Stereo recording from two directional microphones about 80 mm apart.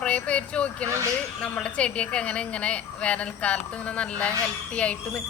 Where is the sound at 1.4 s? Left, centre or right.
Centre.